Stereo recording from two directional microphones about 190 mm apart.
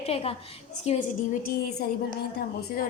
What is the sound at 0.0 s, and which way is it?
Speech, 30° left (ahead or behind).